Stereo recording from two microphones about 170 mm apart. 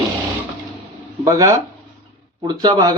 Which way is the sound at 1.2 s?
20° right (ahead or behind).